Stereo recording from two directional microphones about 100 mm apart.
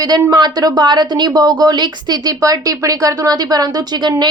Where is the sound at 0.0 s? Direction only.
40° right (ahead or behind).